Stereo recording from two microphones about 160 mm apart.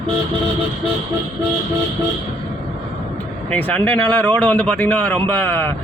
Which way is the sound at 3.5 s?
10° left (ahead or behind).